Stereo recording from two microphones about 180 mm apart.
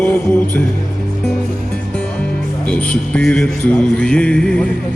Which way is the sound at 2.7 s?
5° left (ahead or behind).